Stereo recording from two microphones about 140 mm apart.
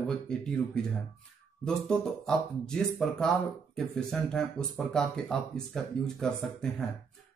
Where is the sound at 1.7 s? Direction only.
5° left (ahead or behind).